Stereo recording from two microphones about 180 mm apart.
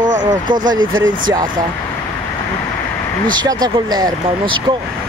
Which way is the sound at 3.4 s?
25° right (ahead or behind).